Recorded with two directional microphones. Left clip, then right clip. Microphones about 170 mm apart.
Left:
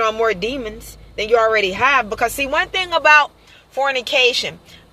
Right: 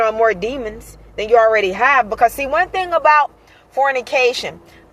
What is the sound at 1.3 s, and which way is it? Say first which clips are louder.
A woman's voice: right 3 dB; 45° left (ahead or behind).